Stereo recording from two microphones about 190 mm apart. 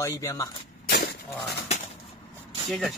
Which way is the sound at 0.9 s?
55° left (ahead or behind).